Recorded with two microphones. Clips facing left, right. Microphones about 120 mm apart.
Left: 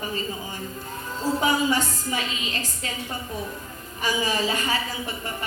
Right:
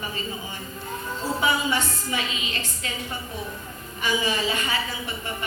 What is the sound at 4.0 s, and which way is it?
Speech, 40° left (ahead or behind).